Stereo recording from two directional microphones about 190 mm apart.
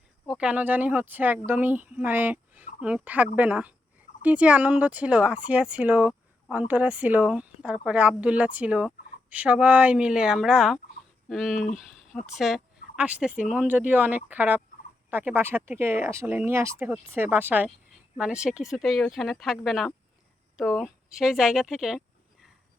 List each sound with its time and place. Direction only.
0.3 s speech: 5° right (ahead or behind)